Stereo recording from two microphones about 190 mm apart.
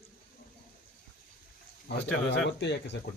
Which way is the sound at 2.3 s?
65° left (ahead or behind).